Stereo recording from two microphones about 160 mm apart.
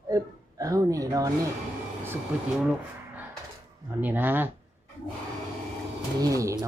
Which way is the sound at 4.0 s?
10° right (ahead or behind).